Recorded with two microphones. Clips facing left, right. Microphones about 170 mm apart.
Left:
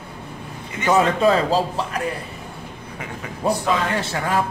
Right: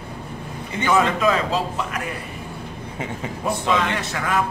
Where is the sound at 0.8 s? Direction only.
30° left (ahead or behind).